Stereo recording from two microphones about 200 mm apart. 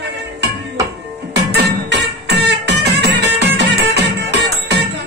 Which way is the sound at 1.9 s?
60° right (ahead or behind).